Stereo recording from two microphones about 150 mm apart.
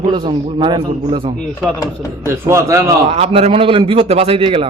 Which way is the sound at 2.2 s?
20° right (ahead or behind).